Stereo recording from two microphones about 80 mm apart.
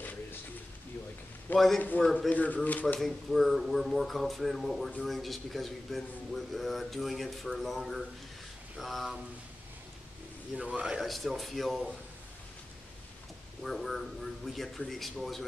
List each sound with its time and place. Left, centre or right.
0.0 s a sound: left
1.5 s speech: left
2.0 s speech: centre
3.0 s speech: centre
10.5 s speech: centre
11.0 s speech: centre
13.7 s speech: centre